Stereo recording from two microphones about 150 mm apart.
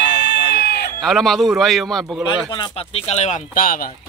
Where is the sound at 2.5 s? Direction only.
35° left (ahead or behind); by 3.9 s 70° left (ahead or behind).